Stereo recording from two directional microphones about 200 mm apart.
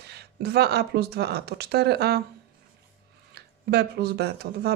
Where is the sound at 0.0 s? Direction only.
55° right (ahead or behind).